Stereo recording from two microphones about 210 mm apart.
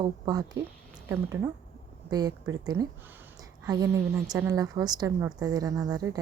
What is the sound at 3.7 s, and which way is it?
A woman's voice, 15° right (ahead or behind).